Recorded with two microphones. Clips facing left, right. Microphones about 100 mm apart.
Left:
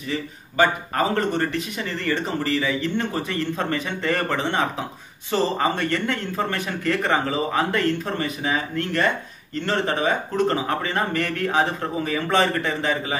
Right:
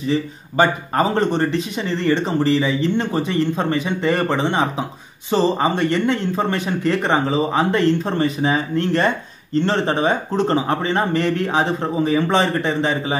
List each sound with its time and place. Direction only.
0.1 s a man's voice: 25° right (ahead or behind)